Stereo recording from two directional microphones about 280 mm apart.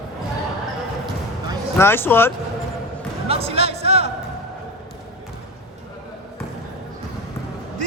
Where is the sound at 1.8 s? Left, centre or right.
Centre.